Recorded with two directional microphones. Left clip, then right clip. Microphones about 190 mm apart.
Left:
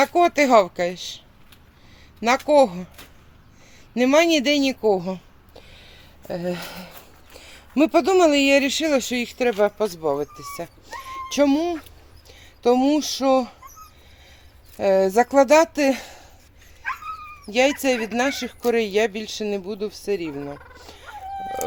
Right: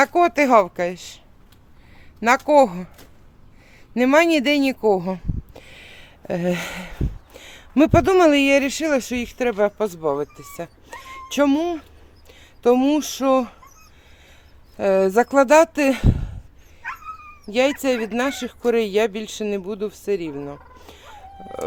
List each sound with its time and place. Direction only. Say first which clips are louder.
0.0 s speech: right 1 dB; 5° right (ahead or behind)
2.5 s speech: right 1 dB; 10° right (ahead or behind)
3.9 s speech: right 1 dB; 10° right (ahead or behind)
5.5 s a sound: right 4 dB; 75° right (ahead or behind)
6.6 s speech: right 6 dB; 25° right (ahead or behind); by 13.6 s 5° right (ahead or behind)
14.8 s speech: even; 5° right (ahead or behind)
17.5 s speech: even; centre (ahead or behind)
20.1 s fowl: right 1 dB; centre (ahead or behind)